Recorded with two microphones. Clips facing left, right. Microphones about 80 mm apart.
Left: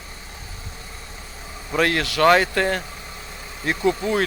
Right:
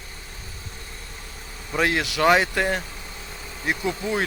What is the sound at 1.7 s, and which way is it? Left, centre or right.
Speech, centre.